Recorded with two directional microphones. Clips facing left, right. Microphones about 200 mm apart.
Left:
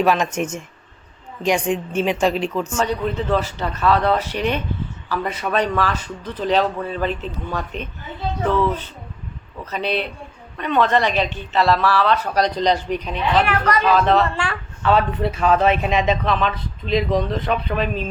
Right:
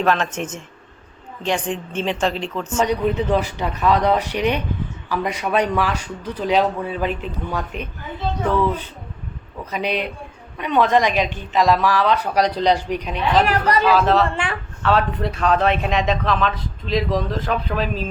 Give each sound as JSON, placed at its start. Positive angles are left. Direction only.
{"t": 0.0, "sound": "a woman's voice", "side_deg": 10}
{"t": 2.6, "sound": "a man's voice", "side_deg": -10}
{"t": 13.3, "sound": "speech", "side_deg": -35}
{"t": 13.8, "sound": "a man's voice", "side_deg": -5}